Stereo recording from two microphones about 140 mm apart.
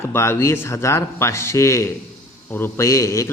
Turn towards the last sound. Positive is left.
turn(degrees=20)  # may be behind; listen again after turning